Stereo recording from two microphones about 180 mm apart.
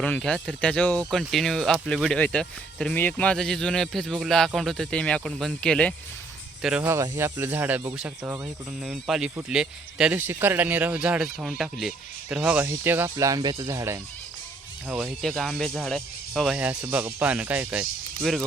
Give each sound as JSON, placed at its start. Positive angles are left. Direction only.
{"t": 0.0, "sound": "speech", "side_deg": 5}
{"t": 6.8, "sound": "speech", "side_deg": -15}
{"t": 14.8, "sound": "speech", "side_deg": -5}